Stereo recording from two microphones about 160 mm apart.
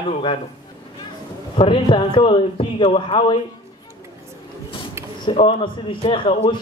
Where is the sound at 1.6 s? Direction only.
30° left (ahead or behind).